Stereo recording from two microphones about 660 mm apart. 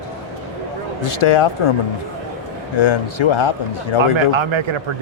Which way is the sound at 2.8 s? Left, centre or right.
Left.